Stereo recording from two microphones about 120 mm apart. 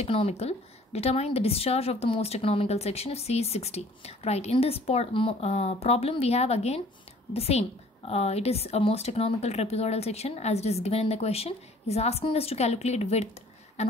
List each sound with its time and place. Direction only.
0.0 s a woman's voice: 60° left (ahead or behind)